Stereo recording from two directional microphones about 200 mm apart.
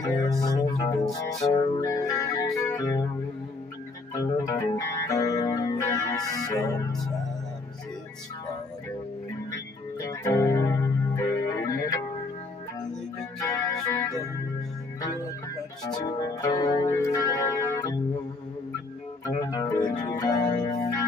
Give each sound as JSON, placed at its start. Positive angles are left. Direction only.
{"t": 0.0, "sound": "music", "side_deg": 15}
{"t": 4.1, "sound": "music", "side_deg": 20}
{"t": 10.2, "sound": "music", "side_deg": 15}
{"t": 13.4, "sound": "music", "side_deg": 15}
{"t": 15.9, "sound": "music", "side_deg": 20}
{"t": 19.2, "sound": "music", "side_deg": 20}